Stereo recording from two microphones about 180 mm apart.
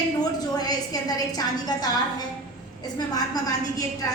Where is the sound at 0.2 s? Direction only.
20° left (ahead or behind).